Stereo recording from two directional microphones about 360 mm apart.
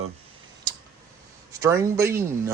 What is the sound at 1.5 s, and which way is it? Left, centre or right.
A man's voice, centre.